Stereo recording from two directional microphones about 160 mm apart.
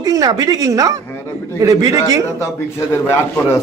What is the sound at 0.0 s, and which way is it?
A woman's voice, 25° right (ahead or behind).